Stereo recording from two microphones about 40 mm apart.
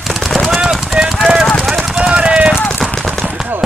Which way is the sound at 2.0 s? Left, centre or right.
Right.